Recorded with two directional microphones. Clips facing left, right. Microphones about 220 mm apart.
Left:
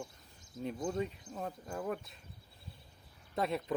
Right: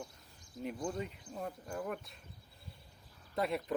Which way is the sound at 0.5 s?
20° left (ahead or behind).